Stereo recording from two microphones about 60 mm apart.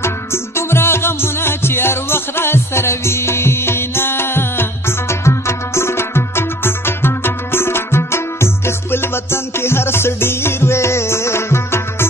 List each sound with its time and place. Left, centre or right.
0.0 s music: left